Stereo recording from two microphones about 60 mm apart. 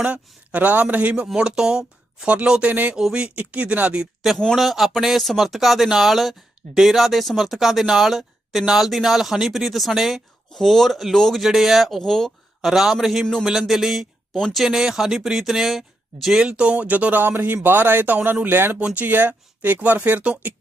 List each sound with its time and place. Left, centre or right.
0.0 s speech: right
1.4 s speech: centre
4.5 s speech: centre
10.5 s speech: centre
12.6 s speech: centre
14.3 s speech: centre
14.6 s speech: centre
16.4 s speech: centre; by 18.8 s right
18.8 s speech: right